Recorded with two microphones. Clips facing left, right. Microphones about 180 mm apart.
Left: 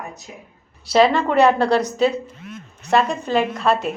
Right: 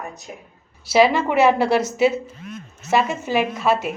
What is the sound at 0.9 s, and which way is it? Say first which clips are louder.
A woman's voice: left 1 dB; 5° right (ahead or behind).